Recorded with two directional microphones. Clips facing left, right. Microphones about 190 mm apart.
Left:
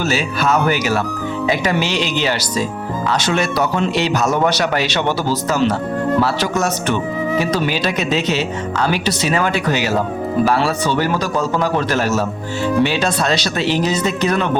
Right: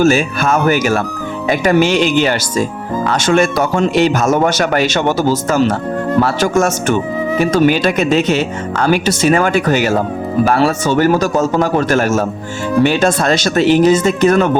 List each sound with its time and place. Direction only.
0.0 s speech: 50° right (ahead or behind)